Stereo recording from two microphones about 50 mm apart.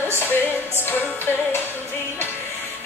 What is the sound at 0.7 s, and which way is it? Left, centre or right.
Music, left.